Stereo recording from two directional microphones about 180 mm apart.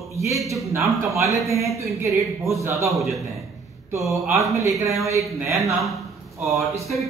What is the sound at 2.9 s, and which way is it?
Speech, centre (ahead or behind).